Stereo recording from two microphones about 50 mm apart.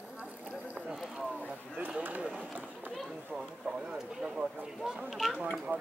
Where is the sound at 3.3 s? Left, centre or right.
Centre.